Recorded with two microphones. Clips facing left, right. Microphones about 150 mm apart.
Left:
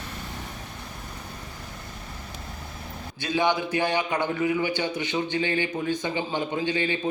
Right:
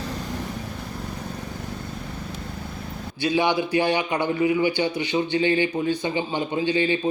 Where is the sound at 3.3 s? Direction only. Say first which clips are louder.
Right 2 dB; 15° right (ahead or behind).